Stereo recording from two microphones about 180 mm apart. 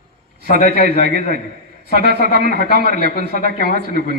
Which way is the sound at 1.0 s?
55° right (ahead or behind).